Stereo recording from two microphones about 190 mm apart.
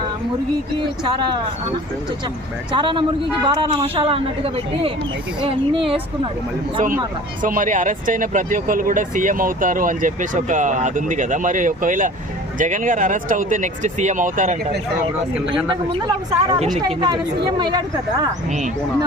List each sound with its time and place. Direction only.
2.7 s a man's voice: 25° right (ahead or behind)
7.4 s speech: 45° right (ahead or behind)
15.7 s a man's voice: 25° right (ahead or behind)